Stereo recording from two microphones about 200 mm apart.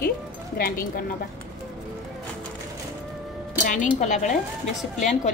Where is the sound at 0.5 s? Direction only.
50° left (ahead or behind).